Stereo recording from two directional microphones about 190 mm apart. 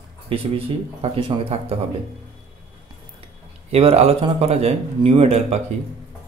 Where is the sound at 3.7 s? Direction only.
30° right (ahead or behind).